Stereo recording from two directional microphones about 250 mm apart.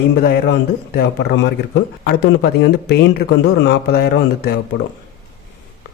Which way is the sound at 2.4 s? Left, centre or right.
Left.